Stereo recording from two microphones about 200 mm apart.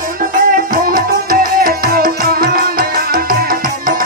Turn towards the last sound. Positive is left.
turn(degrees=-45)  # may be behind; listen again after turning